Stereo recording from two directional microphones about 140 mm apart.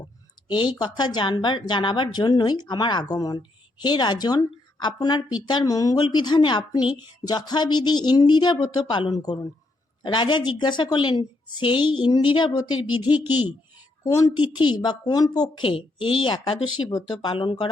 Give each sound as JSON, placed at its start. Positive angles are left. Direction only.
{"t": 0.4, "sound": "speech", "side_deg": 30}
{"t": 13.1, "sound": "speech", "side_deg": -10}
{"t": 14.0, "sound": "a woman's voice", "side_deg": 25}